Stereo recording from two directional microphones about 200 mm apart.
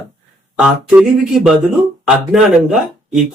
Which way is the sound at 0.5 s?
5° right (ahead or behind).